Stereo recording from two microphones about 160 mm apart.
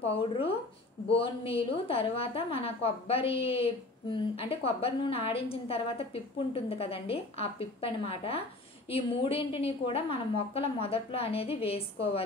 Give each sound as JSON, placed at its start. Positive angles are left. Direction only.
{"t": 0.1, "sound": "a woman's voice", "side_deg": 35}